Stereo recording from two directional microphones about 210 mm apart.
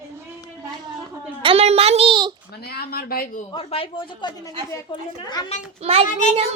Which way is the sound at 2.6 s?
45° left (ahead or behind).